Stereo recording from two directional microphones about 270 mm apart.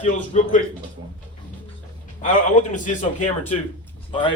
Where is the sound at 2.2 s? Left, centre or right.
Left.